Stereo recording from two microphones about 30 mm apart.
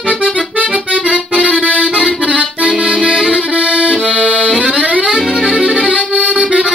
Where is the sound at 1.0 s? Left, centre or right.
Right.